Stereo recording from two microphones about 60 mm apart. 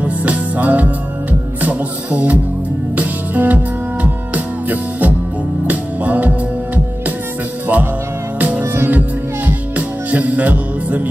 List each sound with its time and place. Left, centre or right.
0.0 s music: right
7.6 s music: right